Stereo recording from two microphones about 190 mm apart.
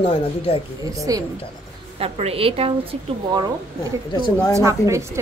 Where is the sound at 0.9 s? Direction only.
20° right (ahead or behind).